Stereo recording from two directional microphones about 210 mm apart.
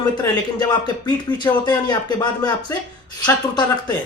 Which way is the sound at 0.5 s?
20° left (ahead or behind).